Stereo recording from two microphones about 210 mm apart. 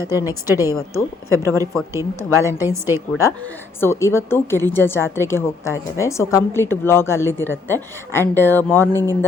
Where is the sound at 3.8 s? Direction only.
10° left (ahead or behind).